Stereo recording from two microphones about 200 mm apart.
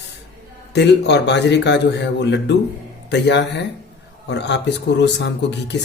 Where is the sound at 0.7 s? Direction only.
60° left (ahead or behind).